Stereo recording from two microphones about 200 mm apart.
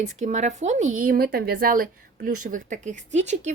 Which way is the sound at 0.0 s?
35° right (ahead or behind).